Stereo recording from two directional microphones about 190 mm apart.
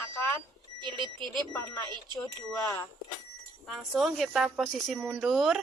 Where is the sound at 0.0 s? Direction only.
15° left (ahead or behind).